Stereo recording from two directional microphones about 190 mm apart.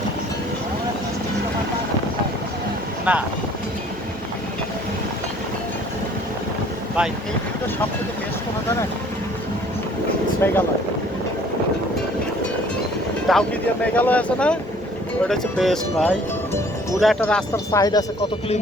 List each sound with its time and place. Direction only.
3.1 s speech: 5° right (ahead or behind)
10.4 s speech: 10° left (ahead or behind)
13.3 s speech: centre (ahead or behind)
17.7 s speech: 20° left (ahead or behind)